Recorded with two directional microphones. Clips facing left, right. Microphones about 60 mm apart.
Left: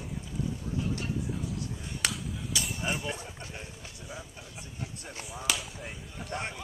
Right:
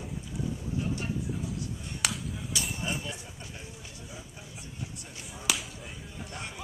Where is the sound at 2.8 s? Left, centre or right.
Left.